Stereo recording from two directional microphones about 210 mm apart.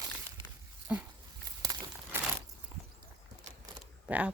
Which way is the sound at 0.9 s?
10° right (ahead or behind).